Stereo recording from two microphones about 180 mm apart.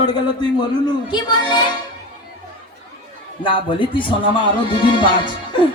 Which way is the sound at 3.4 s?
30° left (ahead or behind).